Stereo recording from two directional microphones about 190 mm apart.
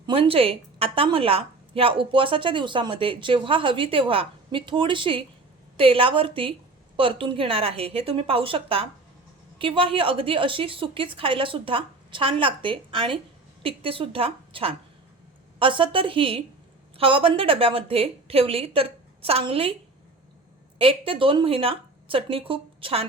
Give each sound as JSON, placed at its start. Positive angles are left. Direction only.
{"t": 0.0, "sound": "a woman's voice", "side_deg": -30}
{"t": 20.7, "sound": "a woman's voice", "side_deg": -30}